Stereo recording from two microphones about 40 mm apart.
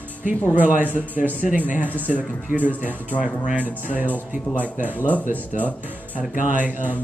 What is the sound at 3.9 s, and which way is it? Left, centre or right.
Speech, right.